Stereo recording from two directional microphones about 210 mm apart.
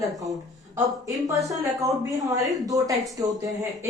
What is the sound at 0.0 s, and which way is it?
Speech, 15° right (ahead or behind).